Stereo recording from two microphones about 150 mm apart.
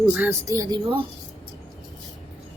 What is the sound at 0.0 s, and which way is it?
Speech, 10° right (ahead or behind).